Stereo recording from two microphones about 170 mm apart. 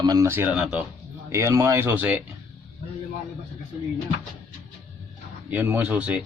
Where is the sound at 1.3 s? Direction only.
15° right (ahead or behind).